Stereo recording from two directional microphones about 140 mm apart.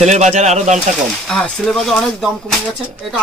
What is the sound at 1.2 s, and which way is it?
Speech, 5° left (ahead or behind).